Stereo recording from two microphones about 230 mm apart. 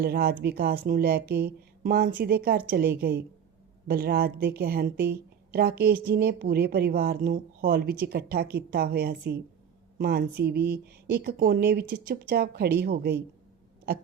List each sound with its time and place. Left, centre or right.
0.0 s a woman's voice: right